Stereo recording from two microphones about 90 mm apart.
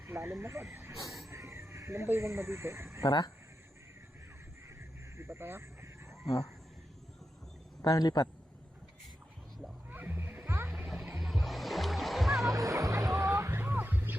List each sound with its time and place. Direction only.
0.0 s speech: 30° right (ahead or behind)
3.0 s a man's voice: 50° left (ahead or behind)
5.1 s a sound: 30° right (ahead or behind)
7.8 s a man's voice: 45° left (ahead or behind)
9.9 s music: 20° right (ahead or behind)
10.4 s music: 30° right (ahead or behind)
10.7 s music: 5° right (ahead or behind)
12.5 s music: 40° right (ahead or behind); by 14.2 s 20° right (ahead or behind)